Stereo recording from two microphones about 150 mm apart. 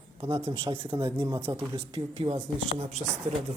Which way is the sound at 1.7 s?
35° right (ahead or behind).